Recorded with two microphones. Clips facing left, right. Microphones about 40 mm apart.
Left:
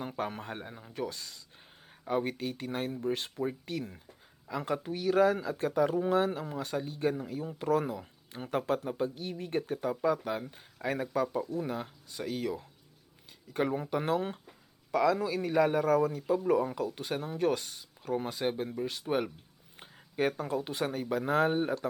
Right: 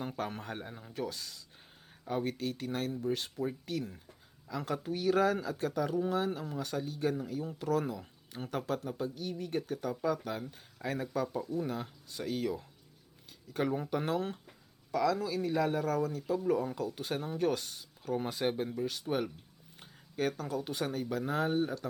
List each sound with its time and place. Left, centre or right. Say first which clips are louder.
0.0 s speech: left 2 dB; centre
3.0 s speech: left 2 dB; left; by 5.5 s centre
5.5 s speech: left 4 dB; centre
6.3 s speech: left 2 dB; centre
18.7 s speech: left 2 dB; centre
21.3 s speech: left 4 dB; left